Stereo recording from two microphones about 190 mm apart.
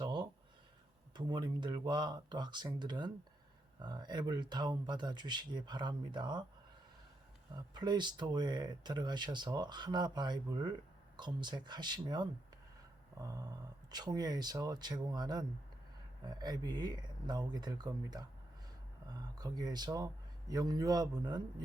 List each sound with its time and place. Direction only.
0.0 s a sound: 25° right (ahead or behind)
1.1 s speech: 25° right (ahead or behind)
7.5 s speech: 25° right (ahead or behind)
19.4 s speech: 20° right (ahead or behind)